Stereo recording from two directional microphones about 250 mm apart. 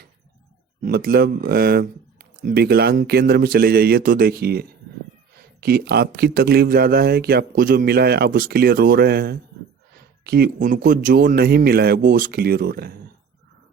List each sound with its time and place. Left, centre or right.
0.8 s speech: right